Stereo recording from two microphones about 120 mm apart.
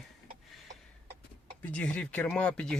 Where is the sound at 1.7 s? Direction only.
10° left (ahead or behind).